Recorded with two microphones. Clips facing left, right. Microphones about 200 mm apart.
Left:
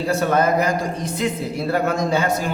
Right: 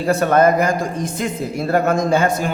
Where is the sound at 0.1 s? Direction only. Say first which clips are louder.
Right 5 dB; 55° right (ahead or behind).